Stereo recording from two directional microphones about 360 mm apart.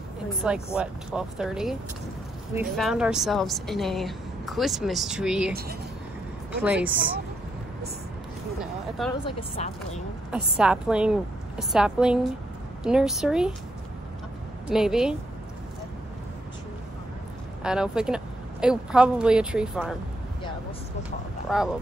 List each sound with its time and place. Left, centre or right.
0.4 s a woman's voice: centre
5.5 s speech: right
6.6 s a woman's voice: centre
9.0 s a woman's voice: centre
9.6 s speech: centre
10.3 s a woman's voice: centre
14.7 s a woman's voice: centre
17.6 s a woman's voice: centre
21.5 s a woman's voice: centre